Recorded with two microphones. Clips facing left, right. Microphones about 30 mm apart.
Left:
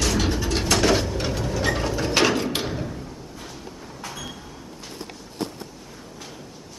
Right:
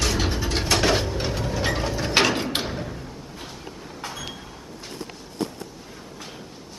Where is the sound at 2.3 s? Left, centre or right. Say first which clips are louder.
Left 1 dB; centre.